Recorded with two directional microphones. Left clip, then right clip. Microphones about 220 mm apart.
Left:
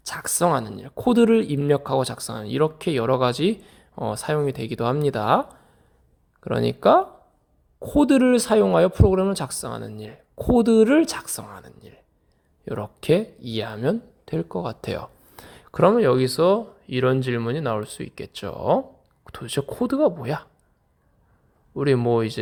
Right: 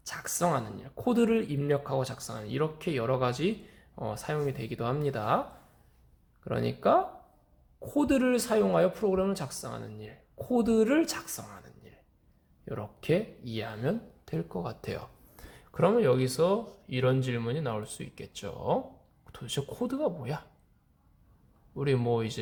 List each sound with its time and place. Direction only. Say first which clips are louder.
0.0 s speech: left 8 dB; 45° left (ahead or behind)
21.8 s speech: left 9 dB; 40° left (ahead or behind)